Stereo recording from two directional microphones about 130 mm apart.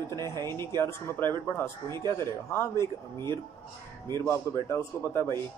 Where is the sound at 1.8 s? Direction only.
30° right (ahead or behind).